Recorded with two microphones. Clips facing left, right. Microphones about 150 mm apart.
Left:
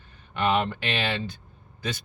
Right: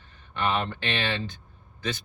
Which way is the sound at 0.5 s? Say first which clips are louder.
Left 3 dB; 15° left (ahead or behind).